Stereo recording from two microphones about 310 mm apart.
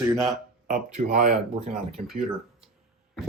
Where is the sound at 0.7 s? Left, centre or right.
Right.